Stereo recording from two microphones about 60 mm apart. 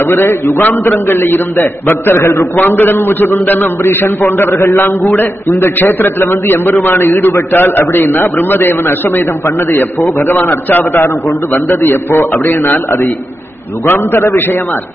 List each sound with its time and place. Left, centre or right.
0.0 s a man's voice: left
4.6 s a man's voice: left
5.8 s a man's voice: left
13.9 s a man's voice: left